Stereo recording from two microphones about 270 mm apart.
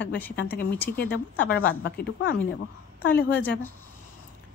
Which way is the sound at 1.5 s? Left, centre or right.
Left.